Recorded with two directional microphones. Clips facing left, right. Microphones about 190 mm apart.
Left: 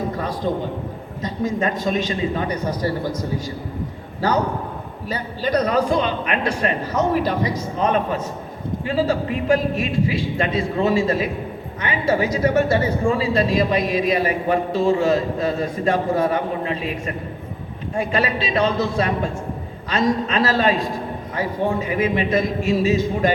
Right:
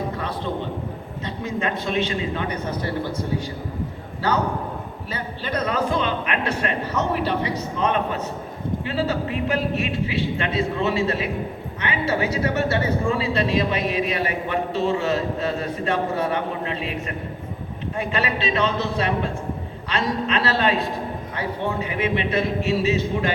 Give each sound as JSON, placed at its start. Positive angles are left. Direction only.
{"t": 0.2, "sound": "a sound", "side_deg": 40}
{"t": 1.2, "sound": "speech", "side_deg": 40}
{"t": 5.0, "sound": "speech", "side_deg": 40}
{"t": 17.9, "sound": "speech", "side_deg": 40}